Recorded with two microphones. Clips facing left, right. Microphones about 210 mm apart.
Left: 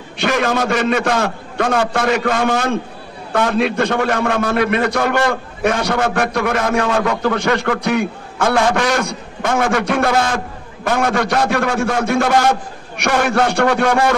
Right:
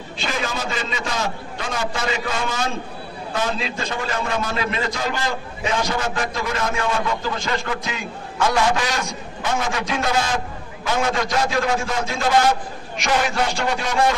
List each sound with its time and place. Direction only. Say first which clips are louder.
0.2 s a man's voice: left 9 dB; 65° left (ahead or behind)